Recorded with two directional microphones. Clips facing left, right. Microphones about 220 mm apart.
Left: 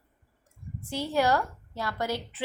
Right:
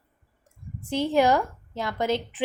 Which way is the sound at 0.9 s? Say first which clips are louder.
Right 5 dB; 20° right (ahead or behind).